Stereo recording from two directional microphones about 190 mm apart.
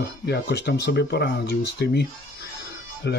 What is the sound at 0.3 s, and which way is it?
Speech, 60° left (ahead or behind).